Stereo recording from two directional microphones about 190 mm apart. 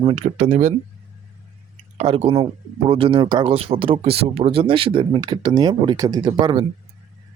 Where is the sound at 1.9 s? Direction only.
30° right (ahead or behind).